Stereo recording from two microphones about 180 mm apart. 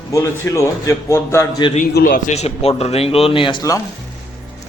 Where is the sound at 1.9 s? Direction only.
50° left (ahead or behind).